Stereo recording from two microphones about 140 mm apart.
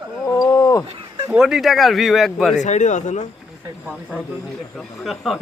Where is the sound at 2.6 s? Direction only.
60° left (ahead or behind).